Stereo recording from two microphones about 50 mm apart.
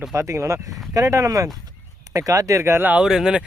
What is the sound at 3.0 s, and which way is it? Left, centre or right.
Speech, centre.